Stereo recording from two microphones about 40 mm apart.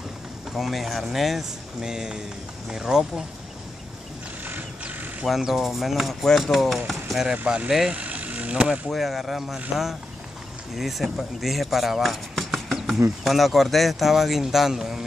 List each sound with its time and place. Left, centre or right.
0.5 s speech: centre
1.8 s speech: centre
5.5 s speech: centre
6.9 s a sound: centre
7.4 s speech: right
7.9 s vehicle: right
8.9 s speech: centre
12.7 s speech: centre